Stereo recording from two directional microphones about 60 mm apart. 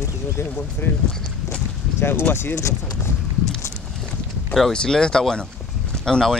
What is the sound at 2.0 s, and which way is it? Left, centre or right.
Speech, left.